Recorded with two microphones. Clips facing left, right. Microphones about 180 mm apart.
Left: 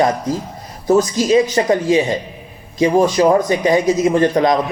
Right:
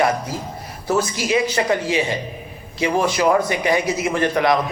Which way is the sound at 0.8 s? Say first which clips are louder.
Left 7 dB; 20° left (ahead or behind).